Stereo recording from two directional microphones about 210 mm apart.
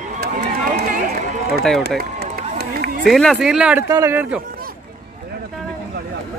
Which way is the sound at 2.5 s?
45° right (ahead or behind).